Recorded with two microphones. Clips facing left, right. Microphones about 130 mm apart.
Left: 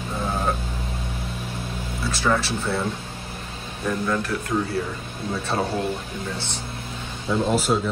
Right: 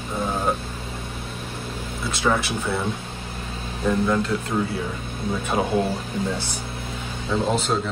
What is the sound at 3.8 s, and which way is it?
Speech, 20° right (ahead or behind).